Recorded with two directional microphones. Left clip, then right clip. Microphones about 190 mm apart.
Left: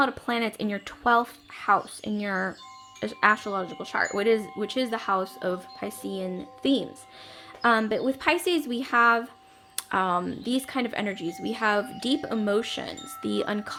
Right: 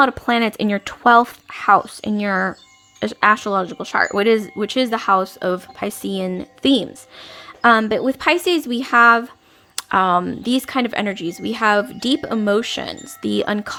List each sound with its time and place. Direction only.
0.0 s speech: 35° right (ahead or behind)